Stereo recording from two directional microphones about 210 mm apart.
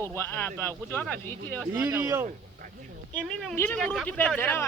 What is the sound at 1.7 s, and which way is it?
Speech, 10° right (ahead or behind).